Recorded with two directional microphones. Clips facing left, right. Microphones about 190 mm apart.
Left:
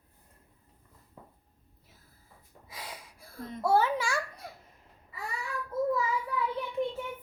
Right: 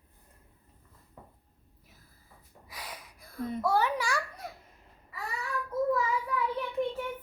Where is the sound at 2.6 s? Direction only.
25° left (ahead or behind).